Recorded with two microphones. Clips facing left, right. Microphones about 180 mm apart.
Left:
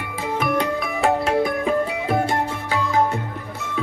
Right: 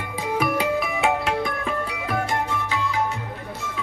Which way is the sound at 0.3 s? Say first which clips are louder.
Even; 5° right (ahead or behind).